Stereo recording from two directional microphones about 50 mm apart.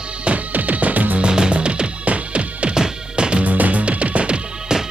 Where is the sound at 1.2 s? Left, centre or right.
Centre.